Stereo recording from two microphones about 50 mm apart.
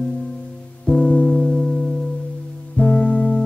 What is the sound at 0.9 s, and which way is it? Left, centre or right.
Music, left.